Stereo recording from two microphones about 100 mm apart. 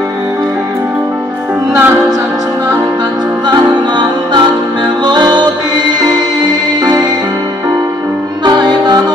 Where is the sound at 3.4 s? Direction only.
50° right (ahead or behind).